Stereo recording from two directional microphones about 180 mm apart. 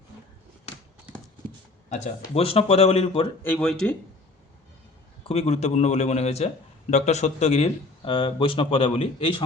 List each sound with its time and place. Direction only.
1.9 s speech: 40° left (ahead or behind)
3.4 s speech: 5° left (ahead or behind)
5.3 s speech: 35° left (ahead or behind)